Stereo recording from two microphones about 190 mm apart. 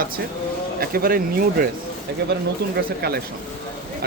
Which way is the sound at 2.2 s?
60° right (ahead or behind).